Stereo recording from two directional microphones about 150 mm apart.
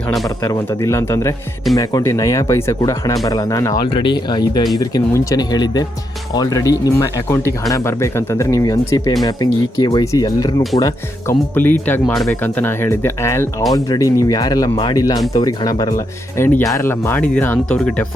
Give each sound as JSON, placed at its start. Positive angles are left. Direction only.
{"t": 0.4, "sound": "speech", "side_deg": 25}
{"t": 16.4, "sound": "speech", "side_deg": 15}